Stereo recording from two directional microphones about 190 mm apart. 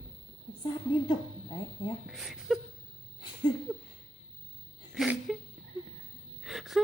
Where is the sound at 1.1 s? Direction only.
25° left (ahead or behind).